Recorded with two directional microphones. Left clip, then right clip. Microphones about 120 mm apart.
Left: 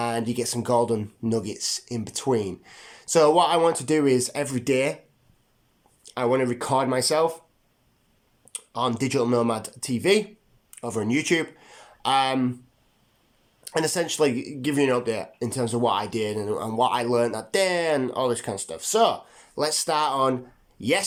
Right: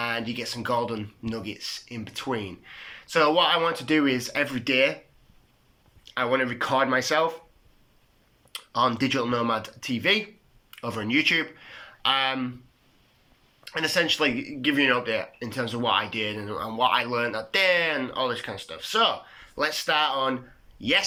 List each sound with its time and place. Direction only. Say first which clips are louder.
0.0 s speech: left 3 dB; 60° left (ahead or behind)
6.1 s speech: left 2 dB; 50° left (ahead or behind)
8.5 s speech: right 2 dB; 35° left (ahead or behind); by 12.5 s 50° left (ahead or behind)
13.7 s speech: right 1 dB; 55° left (ahead or behind)